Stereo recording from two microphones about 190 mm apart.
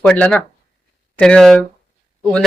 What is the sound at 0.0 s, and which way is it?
Speech, 5° left (ahead or behind).